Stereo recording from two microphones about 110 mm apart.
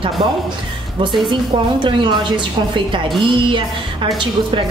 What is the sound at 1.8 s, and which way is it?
A woman's voice, 45° right (ahead or behind).